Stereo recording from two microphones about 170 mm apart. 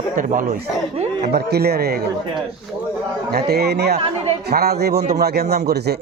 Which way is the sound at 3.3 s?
70° right (ahead or behind).